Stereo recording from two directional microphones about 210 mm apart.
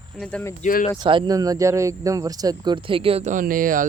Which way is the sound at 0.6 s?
40° left (ahead or behind).